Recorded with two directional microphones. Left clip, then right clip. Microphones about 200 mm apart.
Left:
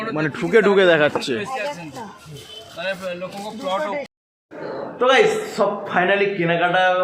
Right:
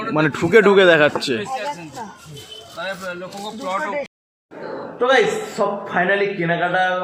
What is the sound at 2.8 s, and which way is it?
A man's voice, 50° left (ahead or behind).